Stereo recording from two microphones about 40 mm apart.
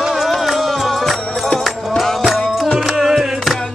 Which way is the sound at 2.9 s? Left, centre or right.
Centre.